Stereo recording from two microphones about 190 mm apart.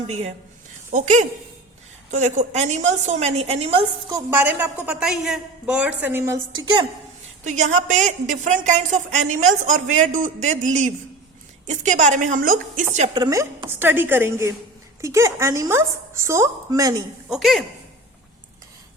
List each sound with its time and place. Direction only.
0.1 s a woman's voice: 35° right (ahead or behind)
4.1 s a woman's voice: 10° right (ahead or behind)
7.4 s a woman's voice: 40° right (ahead or behind)
13.1 s a woman's voice: 20° right (ahead or behind)
17.2 s a woman's voice: centre (ahead or behind)